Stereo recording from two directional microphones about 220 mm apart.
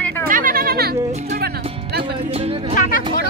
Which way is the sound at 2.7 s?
40° left (ahead or behind).